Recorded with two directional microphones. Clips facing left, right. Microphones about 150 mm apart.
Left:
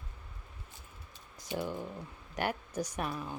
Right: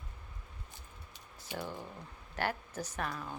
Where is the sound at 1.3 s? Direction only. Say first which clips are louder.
Left 5 dB; 15° left (ahead or behind).